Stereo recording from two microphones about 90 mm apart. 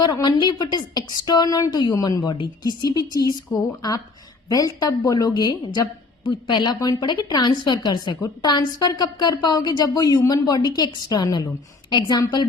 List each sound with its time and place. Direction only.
0.0 s a woman's voice: 55° left (ahead or behind)
4.4 s a woman's voice: 45° left (ahead or behind)